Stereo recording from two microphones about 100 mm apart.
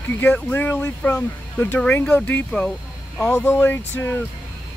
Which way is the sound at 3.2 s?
20° left (ahead or behind).